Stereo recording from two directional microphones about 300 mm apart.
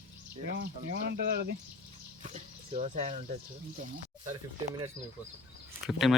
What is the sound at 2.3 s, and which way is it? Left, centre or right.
Speech, right.